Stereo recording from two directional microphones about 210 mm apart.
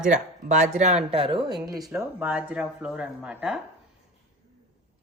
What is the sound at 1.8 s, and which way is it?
A woman's voice, 5° right (ahead or behind).